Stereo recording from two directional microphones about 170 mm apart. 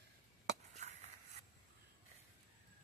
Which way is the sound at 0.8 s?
40° right (ahead or behind).